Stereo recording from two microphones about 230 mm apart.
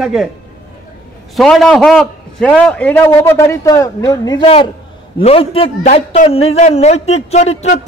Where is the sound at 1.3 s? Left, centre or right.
Centre.